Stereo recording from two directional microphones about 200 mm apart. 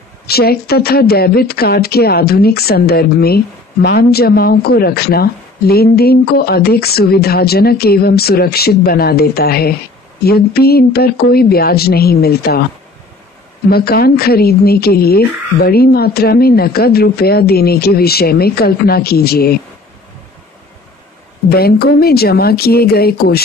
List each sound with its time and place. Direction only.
0.3 s speech: 50° left (ahead or behind)
13.7 s speech: 50° left (ahead or behind)
21.5 s speech: 50° left (ahead or behind)